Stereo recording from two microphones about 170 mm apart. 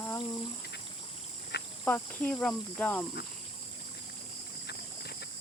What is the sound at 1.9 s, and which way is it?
Cricket, 10° left (ahead or behind).